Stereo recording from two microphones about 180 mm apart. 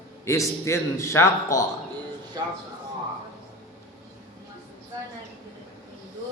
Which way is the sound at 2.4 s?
20° right (ahead or behind).